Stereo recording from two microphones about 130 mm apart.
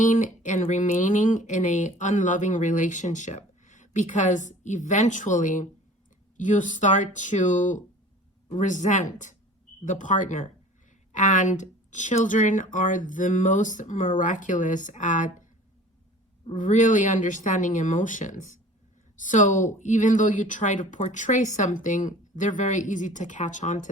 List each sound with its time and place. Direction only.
0.0 s speech: 75° left (ahead or behind)
16.6 s speech: 75° left (ahead or behind)